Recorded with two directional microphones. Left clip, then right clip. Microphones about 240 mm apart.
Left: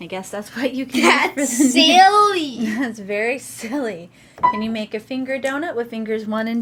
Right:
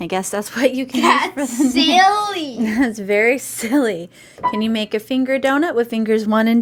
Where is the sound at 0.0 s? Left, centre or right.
Right.